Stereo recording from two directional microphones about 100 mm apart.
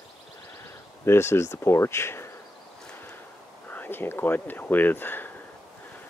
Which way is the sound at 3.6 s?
20° left (ahead or behind).